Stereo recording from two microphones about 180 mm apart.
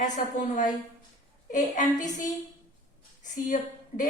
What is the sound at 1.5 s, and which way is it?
Speech, 45° left (ahead or behind).